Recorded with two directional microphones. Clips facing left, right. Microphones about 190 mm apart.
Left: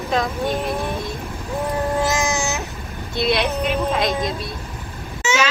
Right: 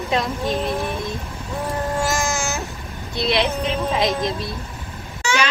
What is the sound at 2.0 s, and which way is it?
Baby cry, 20° left (ahead or behind).